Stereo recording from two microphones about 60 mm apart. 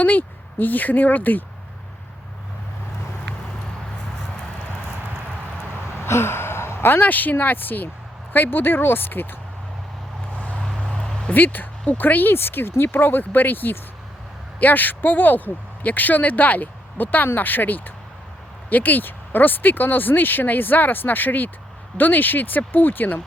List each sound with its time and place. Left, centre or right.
0.0 s speech: left
6.0 s a sound: left
8.3 s speech: left
10.6 s vehicle: centre
11.3 s speech: left